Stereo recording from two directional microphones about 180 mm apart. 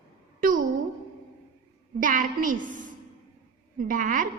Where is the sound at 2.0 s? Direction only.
50° right (ahead or behind).